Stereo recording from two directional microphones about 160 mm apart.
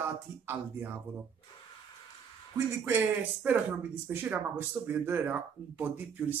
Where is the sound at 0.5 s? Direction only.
15° right (ahead or behind).